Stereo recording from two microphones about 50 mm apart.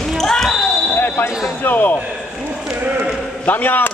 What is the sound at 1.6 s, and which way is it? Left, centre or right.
Speech, left.